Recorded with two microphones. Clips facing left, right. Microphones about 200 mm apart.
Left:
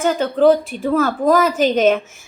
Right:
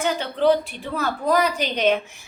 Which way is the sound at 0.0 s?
50° left (ahead or behind).